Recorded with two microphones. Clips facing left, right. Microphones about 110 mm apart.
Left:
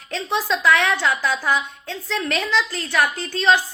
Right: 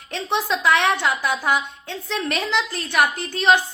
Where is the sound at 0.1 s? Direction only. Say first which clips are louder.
Even; 25° right (ahead or behind).